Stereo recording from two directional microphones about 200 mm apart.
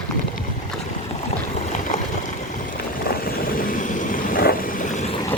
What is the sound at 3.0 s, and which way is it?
Vehicle, 45° left (ahead or behind).